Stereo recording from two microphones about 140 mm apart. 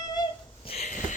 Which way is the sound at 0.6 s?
50° left (ahead or behind).